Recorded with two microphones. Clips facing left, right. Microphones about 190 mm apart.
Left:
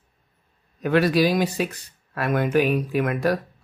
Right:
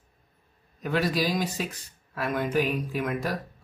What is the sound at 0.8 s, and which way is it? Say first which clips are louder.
Speech: left 7 dB; 65° left (ahead or behind).